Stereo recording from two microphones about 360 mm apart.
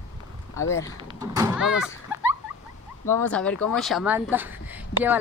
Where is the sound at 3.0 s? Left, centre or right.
Centre.